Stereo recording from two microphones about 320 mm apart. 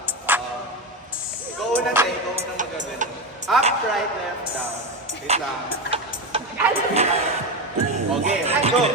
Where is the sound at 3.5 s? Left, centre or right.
Centre.